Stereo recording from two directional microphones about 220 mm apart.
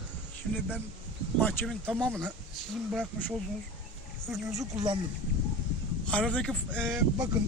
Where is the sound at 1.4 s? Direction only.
5° left (ahead or behind).